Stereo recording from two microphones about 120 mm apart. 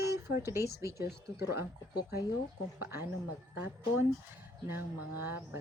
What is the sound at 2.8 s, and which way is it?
Speech, 20° right (ahead or behind).